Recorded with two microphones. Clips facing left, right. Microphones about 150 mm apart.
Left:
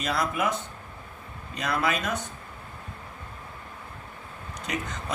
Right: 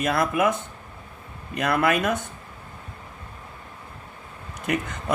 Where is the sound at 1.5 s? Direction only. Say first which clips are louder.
Right 6 dB; 60° right (ahead or behind).